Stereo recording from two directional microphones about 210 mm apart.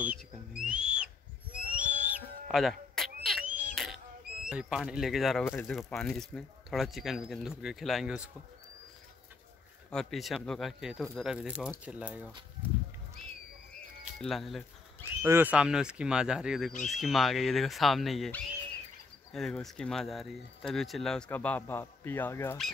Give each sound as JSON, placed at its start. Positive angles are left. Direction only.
{"t": 0.0, "sound": "owl", "side_deg": -5}
{"t": 1.7, "sound": "a sound", "side_deg": -5}
{"t": 4.5, "sound": "speech", "side_deg": -5}
{"t": 5.4, "sound": "speech", "side_deg": 10}
{"t": 9.8, "sound": "speech", "side_deg": 0}
{"t": 14.2, "sound": "speech", "side_deg": 0}